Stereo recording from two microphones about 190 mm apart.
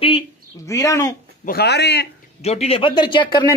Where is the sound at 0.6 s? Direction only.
15° left (ahead or behind).